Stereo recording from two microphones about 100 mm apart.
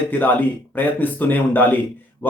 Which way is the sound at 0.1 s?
15° left (ahead or behind).